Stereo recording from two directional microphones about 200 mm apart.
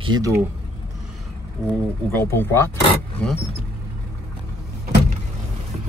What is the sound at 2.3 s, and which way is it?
Speech, 10° left (ahead or behind).